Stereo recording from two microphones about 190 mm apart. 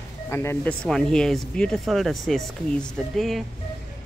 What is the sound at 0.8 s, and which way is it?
Speech, centre (ahead or behind).